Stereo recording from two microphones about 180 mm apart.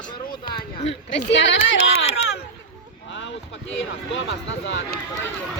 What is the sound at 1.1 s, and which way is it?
Speech, 80° left.